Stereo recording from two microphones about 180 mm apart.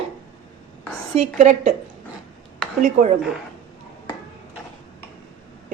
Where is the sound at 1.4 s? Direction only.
35° right (ahead or behind).